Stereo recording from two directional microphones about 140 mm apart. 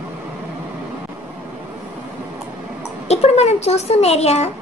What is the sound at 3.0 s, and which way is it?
A child's voice, 50° left (ahead or behind).